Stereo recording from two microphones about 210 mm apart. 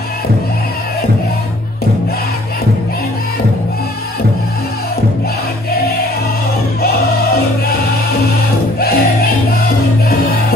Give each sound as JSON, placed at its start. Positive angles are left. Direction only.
{"t": 8.7, "sound": "music", "side_deg": 45}